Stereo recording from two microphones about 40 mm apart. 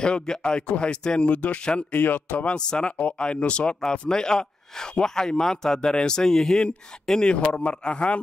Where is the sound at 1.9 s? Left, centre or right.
Left.